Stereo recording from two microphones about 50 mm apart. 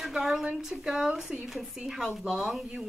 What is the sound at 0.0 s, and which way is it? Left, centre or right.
A woman's voice, centre.